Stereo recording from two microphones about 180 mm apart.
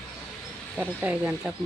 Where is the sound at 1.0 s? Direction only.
10° right (ahead or behind).